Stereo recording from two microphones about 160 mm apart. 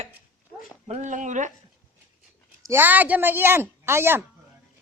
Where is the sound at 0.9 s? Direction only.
50° right (ahead or behind).